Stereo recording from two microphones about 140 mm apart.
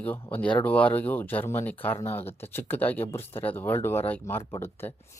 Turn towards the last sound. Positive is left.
turn(degrees=15)  # may be behind; listen again after turning